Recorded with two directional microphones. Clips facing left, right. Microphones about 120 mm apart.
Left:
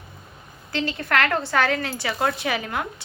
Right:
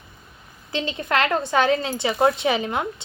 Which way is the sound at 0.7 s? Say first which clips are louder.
Even; 20° right (ahead or behind).